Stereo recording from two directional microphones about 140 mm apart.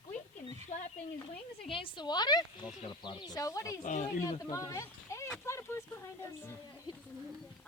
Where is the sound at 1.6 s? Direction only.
40° left (ahead or behind).